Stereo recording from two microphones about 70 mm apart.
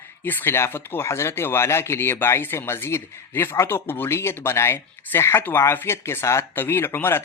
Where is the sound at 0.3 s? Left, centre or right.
Left.